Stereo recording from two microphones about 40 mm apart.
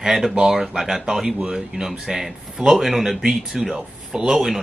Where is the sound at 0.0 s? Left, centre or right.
Centre.